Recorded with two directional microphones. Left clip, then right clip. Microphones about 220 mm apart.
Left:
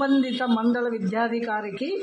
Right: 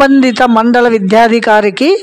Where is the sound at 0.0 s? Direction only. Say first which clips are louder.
Right 16 dB; 50° right (ahead or behind).